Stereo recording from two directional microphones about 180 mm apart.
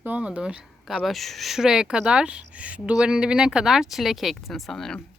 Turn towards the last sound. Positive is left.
turn(degrees=0)  # may be behind; listen again after turning